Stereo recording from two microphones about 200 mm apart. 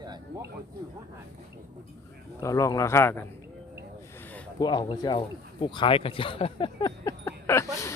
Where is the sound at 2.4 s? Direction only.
15° left (ahead or behind).